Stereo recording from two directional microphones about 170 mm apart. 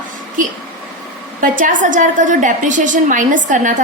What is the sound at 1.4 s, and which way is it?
A woman's voice, 50° right (ahead or behind).